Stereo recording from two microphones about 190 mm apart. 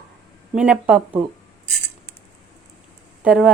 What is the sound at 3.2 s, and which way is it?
Speech, 5° right (ahead or behind).